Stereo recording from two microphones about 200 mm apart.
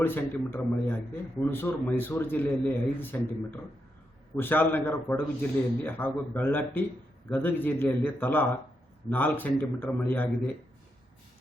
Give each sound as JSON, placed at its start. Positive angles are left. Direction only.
{"t": 0.0, "sound": "a man's voice", "side_deg": 10}